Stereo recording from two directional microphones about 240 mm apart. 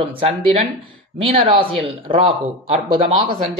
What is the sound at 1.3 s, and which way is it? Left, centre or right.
A woman's voice, right.